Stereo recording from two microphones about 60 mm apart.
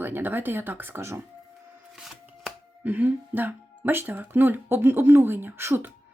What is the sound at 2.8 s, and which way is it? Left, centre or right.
Speech, right.